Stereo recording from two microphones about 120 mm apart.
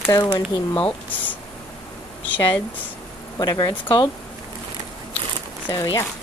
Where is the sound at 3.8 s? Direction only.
45° left (ahead or behind).